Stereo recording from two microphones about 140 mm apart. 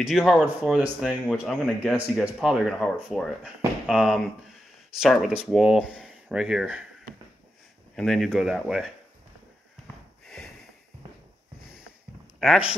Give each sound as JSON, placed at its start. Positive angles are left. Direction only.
{"t": 0.0, "sound": "speech", "side_deg": 0}
{"t": 7.9, "sound": "speech", "side_deg": 5}
{"t": 10.2, "sound": "snort", "side_deg": 5}
{"t": 12.4, "sound": "speech", "side_deg": -5}